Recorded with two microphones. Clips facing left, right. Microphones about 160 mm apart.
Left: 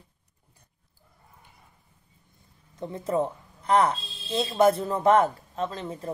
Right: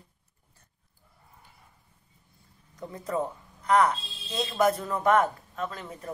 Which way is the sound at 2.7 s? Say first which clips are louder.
Left 4 dB; 25° left (ahead or behind).